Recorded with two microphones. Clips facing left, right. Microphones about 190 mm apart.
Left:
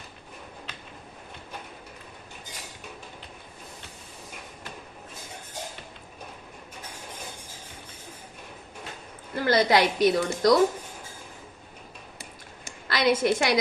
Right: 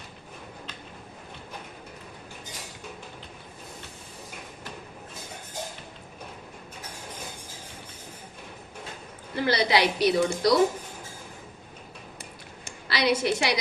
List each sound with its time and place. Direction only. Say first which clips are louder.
9.3 s a woman's voice: left 2 dB; 45° left (ahead or behind)
12.9 s a woman's voice: left 2 dB; 50° left (ahead or behind)